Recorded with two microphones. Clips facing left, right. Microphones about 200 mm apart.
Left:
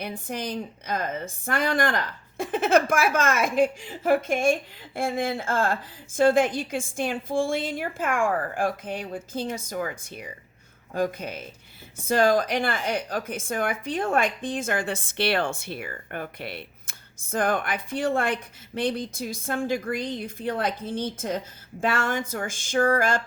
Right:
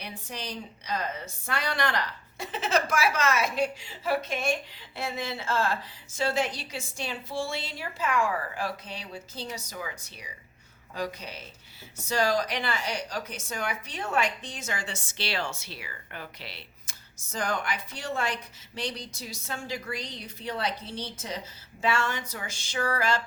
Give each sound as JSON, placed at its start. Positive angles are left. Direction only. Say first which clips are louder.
{"t": 0.0, "sound": "a woman's voice", "louder": "left 7 dB", "side_deg": 50}